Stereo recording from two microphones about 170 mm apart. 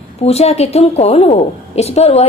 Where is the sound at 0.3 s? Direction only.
40° left (ahead or behind).